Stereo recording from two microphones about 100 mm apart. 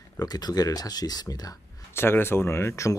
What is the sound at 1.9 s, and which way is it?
Speech, 25° left (ahead or behind).